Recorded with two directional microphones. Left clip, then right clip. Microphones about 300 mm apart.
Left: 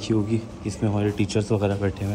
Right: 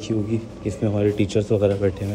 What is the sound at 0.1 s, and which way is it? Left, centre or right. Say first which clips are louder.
Speech: even; centre.